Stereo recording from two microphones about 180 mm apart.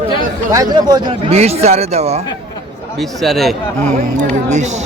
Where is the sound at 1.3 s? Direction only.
35° right (ahead or behind).